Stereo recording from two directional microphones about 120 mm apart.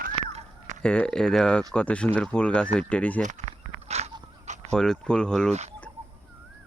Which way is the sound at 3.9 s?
65° right (ahead or behind).